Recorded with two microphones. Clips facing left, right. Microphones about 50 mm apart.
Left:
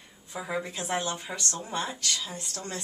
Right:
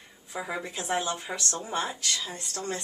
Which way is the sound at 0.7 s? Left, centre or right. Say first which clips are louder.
Right 1 dB; centre.